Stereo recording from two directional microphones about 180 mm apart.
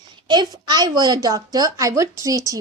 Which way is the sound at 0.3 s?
25° right (ahead or behind).